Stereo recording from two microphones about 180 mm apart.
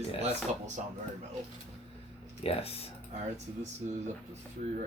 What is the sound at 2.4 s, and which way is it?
Speech, 30° left (ahead or behind).